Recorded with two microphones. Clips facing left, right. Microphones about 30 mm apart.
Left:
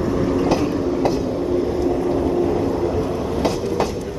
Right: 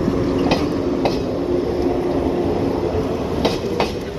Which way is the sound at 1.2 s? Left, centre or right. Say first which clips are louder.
Even; right.